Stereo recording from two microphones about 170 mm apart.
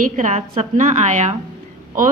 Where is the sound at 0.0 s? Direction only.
50° right (ahead or behind).